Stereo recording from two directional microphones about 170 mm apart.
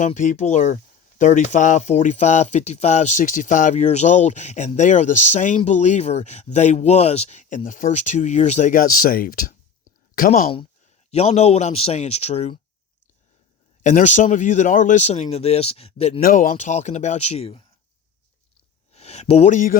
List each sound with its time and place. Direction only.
0.0 s speech: 45° left (ahead or behind)
11.1 s a man's voice: 40° left (ahead or behind)
13.8 s speech: 45° left (ahead or behind)
16.2 s speech: 55° left (ahead or behind); by 17.6 s 35° left (ahead or behind)
18.9 s speech: 40° left (ahead or behind)